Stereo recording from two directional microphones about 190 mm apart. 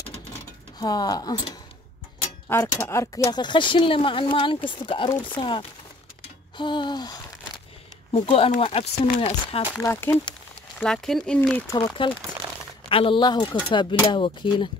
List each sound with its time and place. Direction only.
0.7 s speech: 20° left (ahead or behind)
6.5 s a sound: 25° left (ahead or behind)
8.1 s speech: 30° left (ahead or behind)
9.8 s speech: 10° left (ahead or behind)
11.7 s speech: 25° left (ahead or behind)